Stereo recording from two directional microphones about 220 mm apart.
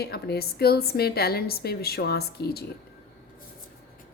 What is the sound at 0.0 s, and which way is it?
A woman's voice, 45° left (ahead or behind).